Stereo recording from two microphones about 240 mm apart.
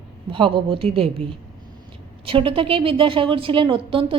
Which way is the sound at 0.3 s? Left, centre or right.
Right.